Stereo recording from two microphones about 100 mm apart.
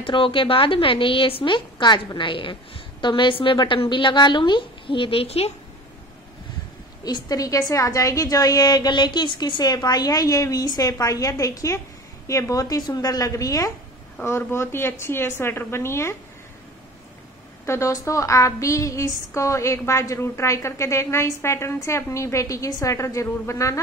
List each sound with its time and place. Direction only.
0.0 s a woman's voice: 60° left (ahead or behind); by 5.5 s 85° left
7.1 s a woman's voice: 45° left (ahead or behind)
14.2 s a woman's voice: 25° left (ahead or behind)
17.6 s a woman's voice: 30° left (ahead or behind)